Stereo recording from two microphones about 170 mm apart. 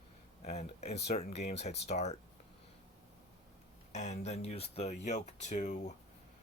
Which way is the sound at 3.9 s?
45° left (ahead or behind).